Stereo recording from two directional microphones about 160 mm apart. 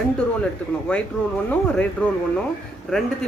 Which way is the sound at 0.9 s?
5° left (ahead or behind).